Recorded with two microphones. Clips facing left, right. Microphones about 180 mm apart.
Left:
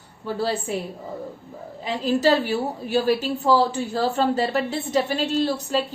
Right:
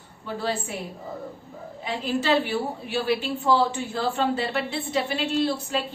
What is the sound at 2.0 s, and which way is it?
A woman's voice, 40° left (ahead or behind).